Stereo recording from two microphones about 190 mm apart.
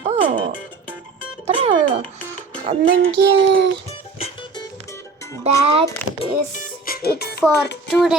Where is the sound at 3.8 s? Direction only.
30° left (ahead or behind).